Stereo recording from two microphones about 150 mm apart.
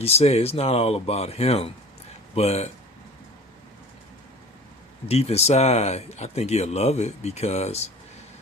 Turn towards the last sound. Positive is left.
turn(degrees=45)  # may be behind; listen again after turning